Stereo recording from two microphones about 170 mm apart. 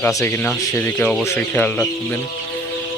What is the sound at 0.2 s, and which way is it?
Speech, 15° left (ahead or behind).